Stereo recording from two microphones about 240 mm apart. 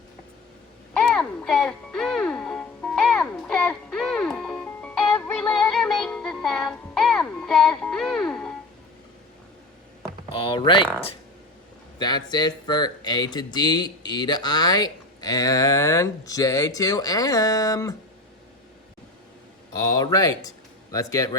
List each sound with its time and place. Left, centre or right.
0.9 s music: centre
10.3 s speech: left
11.9 s speech: centre
19.8 s speech: centre